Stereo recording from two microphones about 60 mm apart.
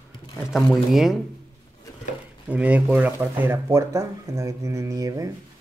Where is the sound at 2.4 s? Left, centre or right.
Right.